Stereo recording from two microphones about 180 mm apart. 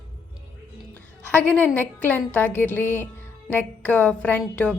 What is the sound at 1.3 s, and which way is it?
A woman's voice, 10° left (ahead or behind).